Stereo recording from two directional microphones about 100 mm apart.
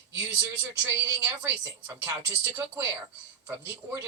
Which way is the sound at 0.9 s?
25° right (ahead or behind).